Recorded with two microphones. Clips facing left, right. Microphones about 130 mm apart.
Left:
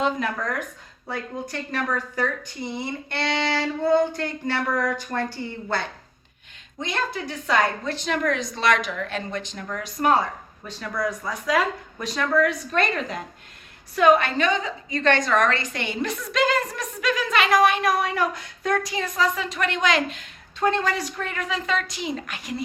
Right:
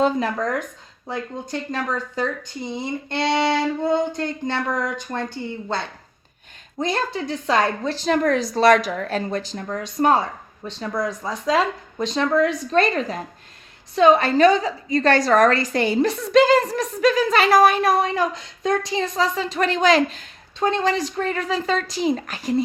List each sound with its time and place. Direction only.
0.0 s music: 30° right (ahead or behind)
6.7 s a woman's voice: 35° right (ahead or behind)
10.7 s music: 25° right (ahead or behind)
13.9 s a woman's voice: 25° right (ahead or behind)
20.6 s a woman's voice: 20° right (ahead or behind)